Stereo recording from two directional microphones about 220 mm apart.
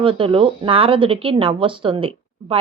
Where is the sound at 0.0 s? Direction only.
25° right (ahead or behind).